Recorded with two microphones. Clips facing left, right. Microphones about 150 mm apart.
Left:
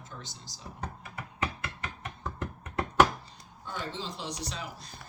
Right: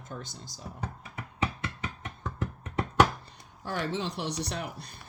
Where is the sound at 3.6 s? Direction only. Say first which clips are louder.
Right 6 dB; 70° right (ahead or behind).